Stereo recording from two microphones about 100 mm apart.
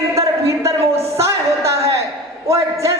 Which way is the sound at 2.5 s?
30° right (ahead or behind).